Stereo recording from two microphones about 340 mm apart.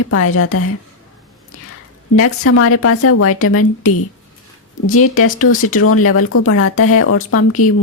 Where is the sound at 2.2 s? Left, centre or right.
Left.